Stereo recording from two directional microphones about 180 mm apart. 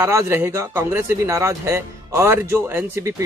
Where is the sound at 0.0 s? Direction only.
15° right (ahead or behind).